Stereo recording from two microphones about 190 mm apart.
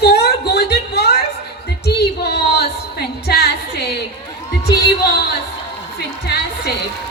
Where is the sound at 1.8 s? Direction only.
60° left (ahead or behind).